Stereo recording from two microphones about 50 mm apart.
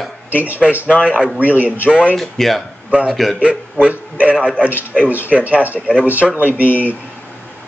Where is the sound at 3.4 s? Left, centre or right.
Right.